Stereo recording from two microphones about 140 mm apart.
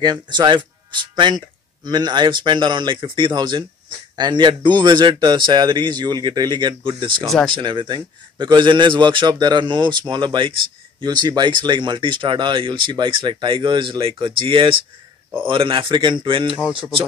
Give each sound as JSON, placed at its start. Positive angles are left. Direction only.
{"t": 0.0, "sound": "speech", "side_deg": -30}
{"t": 7.2, "sound": "speech", "side_deg": 5}
{"t": 7.5, "sound": "speech", "side_deg": -35}
{"t": 16.5, "sound": "speech", "side_deg": -5}